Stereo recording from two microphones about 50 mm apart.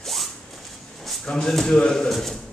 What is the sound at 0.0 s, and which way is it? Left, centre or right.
Zipper, centre.